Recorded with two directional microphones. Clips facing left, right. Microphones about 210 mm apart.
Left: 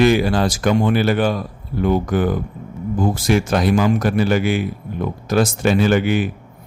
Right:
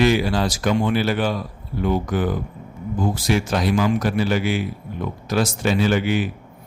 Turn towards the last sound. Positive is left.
turn(degrees=50)  # may be behind; listen again after turning